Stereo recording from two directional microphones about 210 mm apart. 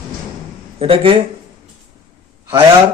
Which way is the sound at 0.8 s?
25° right (ahead or behind).